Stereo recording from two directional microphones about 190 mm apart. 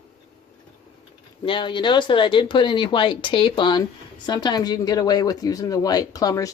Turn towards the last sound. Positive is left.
turn(degrees=20)  # may be behind; listen again after turning